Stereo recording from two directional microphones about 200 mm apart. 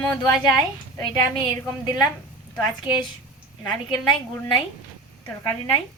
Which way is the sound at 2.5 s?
5° right (ahead or behind).